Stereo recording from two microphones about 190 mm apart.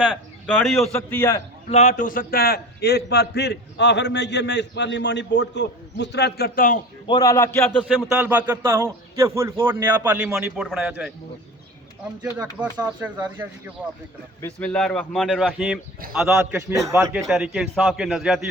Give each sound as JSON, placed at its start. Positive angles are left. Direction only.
{"t": 0.0, "sound": "a man's voice", "side_deg": 0}
{"t": 0.9, "sound": "a man's voice", "side_deg": 15}
{"t": 1.7, "sound": "a man's voice", "side_deg": 40}
{"t": 7.1, "sound": "a man's voice", "side_deg": 20}
{"t": 8.1, "sound": "a man's voice", "side_deg": -10}
{"t": 12.4, "sound": "a man's voice", "side_deg": -15}
{"t": 14.4, "sound": "a man's voice", "side_deg": 5}
{"t": 17.2, "sound": "speech", "side_deg": 0}